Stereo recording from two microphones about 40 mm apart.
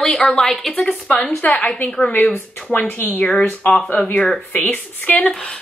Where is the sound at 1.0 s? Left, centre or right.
Left.